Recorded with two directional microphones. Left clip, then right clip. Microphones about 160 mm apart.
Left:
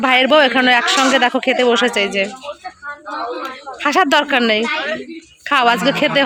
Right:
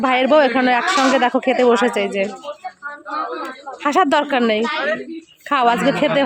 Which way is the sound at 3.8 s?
5° right (ahead or behind).